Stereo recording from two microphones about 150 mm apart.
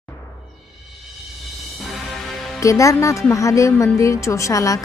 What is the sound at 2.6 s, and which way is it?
Speech, 20° left (ahead or behind).